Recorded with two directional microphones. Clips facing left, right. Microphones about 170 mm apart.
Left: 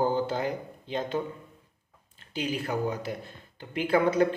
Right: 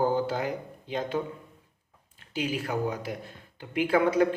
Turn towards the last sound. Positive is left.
turn(degrees=-10)  # may be behind; listen again after turning